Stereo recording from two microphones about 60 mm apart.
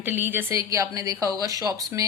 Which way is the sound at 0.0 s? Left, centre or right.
Right.